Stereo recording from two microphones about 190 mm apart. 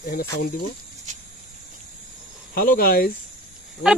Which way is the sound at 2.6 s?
50° left (ahead or behind).